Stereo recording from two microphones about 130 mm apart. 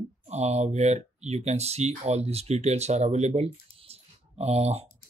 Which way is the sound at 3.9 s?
55° right (ahead or behind).